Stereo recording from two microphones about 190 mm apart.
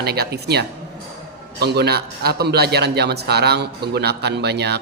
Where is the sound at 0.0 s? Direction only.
55° right (ahead or behind).